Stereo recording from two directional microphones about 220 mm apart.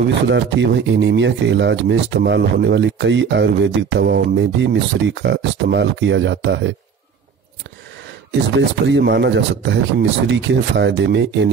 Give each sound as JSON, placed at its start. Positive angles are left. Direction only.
{"t": 0.1, "sound": "speech", "side_deg": -55}
{"t": 8.3, "sound": "speech", "side_deg": -55}